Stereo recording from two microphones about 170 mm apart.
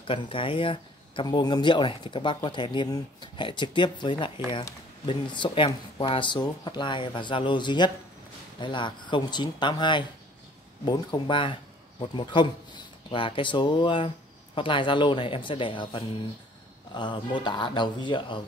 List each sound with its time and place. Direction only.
0.0 s speech: 30° left (ahead or behind)